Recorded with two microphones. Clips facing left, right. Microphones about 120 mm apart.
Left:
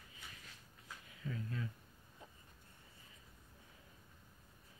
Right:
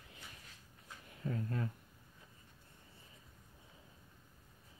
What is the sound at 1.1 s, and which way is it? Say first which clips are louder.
Speech: right 5 dB; 40° right (ahead or behind).